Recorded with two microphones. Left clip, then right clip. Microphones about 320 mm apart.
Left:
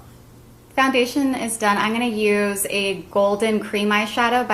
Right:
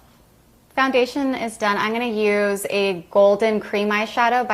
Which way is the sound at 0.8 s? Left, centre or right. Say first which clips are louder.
Even; right.